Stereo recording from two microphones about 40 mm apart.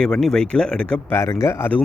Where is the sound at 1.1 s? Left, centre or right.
Left.